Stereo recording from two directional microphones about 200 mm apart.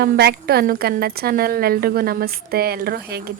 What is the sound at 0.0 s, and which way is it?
A woman's voice, 50° right (ahead or behind).